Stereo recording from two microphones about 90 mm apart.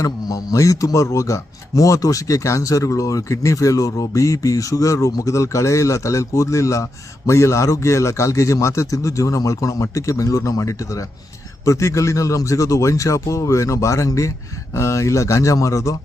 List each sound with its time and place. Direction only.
0.0 s a man's voice: 40° left (ahead or behind)